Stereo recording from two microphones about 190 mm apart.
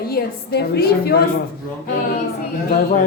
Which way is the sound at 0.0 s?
55° left (ahead or behind).